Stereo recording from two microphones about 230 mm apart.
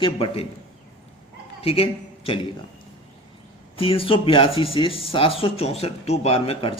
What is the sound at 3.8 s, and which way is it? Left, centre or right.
A man's voice, left.